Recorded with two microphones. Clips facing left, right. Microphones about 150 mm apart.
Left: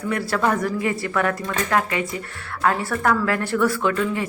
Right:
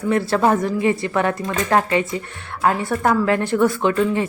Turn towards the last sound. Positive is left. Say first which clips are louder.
# right 3 dB
turn(degrees=-25)  # may be behind; listen again after turning